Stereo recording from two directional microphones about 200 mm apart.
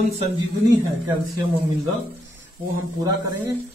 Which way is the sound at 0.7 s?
15° right (ahead or behind).